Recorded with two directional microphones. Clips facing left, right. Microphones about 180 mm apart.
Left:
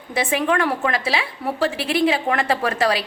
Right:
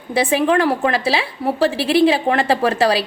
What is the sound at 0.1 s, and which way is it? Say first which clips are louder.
A woman's voice: right 5 dB; 30° right (ahead or behind).